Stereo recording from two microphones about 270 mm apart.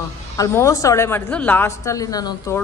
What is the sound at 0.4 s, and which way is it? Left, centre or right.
A woman's voice, centre.